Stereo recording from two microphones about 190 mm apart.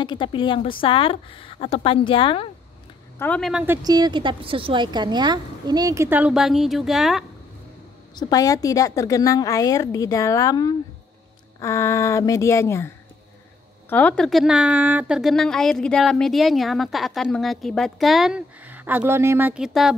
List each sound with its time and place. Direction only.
0.0 s a woman's voice: 25° left (ahead or behind)
3.2 s a woman's voice: 5° left (ahead or behind)
3.6 s a woman's voice: 15° right (ahead or behind)
8.2 s a woman's voice: 20° left (ahead or behind); by 20.0 s centre (ahead or behind)